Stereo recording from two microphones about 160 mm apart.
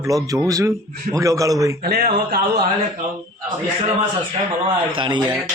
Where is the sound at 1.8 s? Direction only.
70° right (ahead or behind).